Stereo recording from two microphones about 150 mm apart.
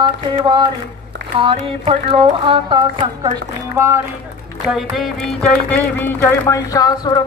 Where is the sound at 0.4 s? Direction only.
30° right (ahead or behind).